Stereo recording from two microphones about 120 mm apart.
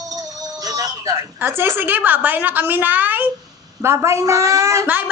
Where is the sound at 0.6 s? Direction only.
30° right (ahead or behind).